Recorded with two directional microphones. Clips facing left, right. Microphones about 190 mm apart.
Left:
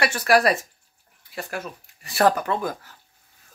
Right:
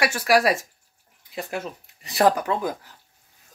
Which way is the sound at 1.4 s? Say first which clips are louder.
Right 2 dB; 20° right (ahead or behind).